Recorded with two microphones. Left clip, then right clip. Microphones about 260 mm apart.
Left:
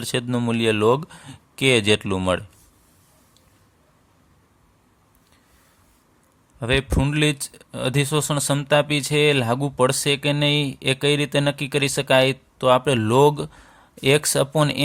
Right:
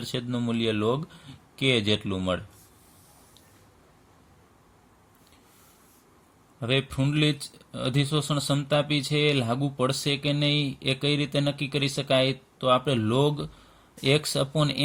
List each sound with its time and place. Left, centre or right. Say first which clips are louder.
0.0 s speech: left 7 dB; left
6.6 s speech: left 5 dB; left